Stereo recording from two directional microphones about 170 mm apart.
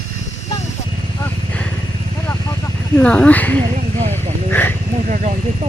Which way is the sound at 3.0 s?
5° left (ahead or behind).